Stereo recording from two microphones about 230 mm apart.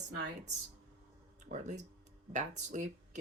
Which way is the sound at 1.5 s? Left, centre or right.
Right.